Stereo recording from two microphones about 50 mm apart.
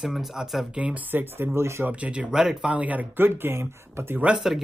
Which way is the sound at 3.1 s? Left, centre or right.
Right.